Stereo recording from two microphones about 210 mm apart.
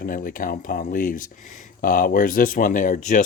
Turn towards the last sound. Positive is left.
turn(degrees=40)  # may be behind; listen again after turning